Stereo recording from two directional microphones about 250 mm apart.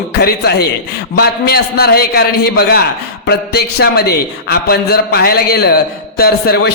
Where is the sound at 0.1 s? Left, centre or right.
Left.